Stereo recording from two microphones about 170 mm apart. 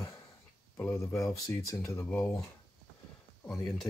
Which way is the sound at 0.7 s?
15° left (ahead or behind).